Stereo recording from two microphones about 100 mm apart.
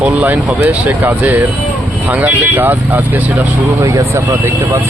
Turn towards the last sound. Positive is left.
turn(degrees=-30)  # may be behind; listen again after turning